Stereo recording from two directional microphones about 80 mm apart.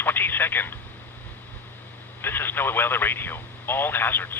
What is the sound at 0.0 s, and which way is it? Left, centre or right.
Telephone, left.